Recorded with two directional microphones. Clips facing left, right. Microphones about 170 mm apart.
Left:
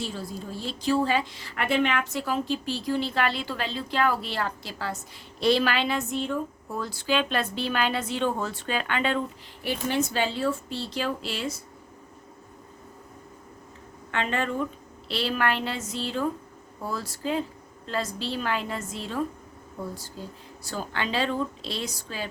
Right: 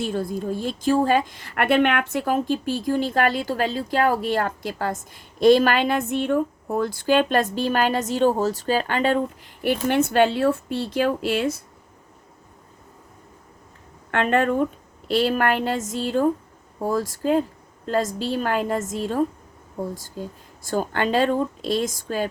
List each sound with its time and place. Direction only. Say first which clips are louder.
0.0 s a woman's voice: right 8 dB; 55° right (ahead or behind)
9.6 s speech: right 6 dB; 60° right (ahead or behind)
14.1 s a woman's voice: right 8 dB; 55° right (ahead or behind)